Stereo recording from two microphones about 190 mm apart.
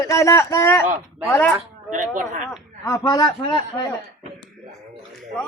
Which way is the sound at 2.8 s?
15° left (ahead or behind).